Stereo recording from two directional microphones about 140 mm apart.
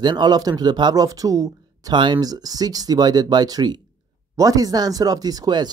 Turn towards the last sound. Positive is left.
turn(degrees=-30)  # may be behind; listen again after turning